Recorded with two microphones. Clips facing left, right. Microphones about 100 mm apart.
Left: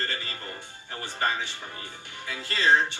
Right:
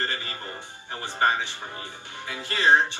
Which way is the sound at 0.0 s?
20° right (ahead or behind).